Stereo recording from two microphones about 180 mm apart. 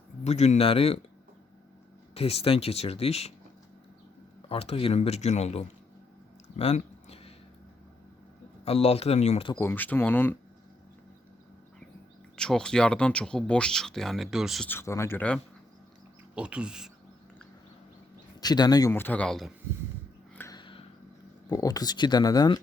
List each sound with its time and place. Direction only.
0.3 s speech: 35° left (ahead or behind)
2.1 s speech: 35° left (ahead or behind)
4.4 s speech: 30° left (ahead or behind)
6.6 s a sound: 35° left (ahead or behind)
8.6 s speech: 35° left (ahead or behind)
9.6 s speech: 10° left (ahead or behind)
12.4 s speech: 5° left (ahead or behind)
14.7 s speech: 15° left (ahead or behind)
16.3 s speech: 5° right (ahead or behind)
18.3 s speech: 20° left (ahead or behind); by 19.5 s centre (ahead or behind)
20.5 s a sound: 25° left (ahead or behind)
21.5 s speech: 20° left (ahead or behind)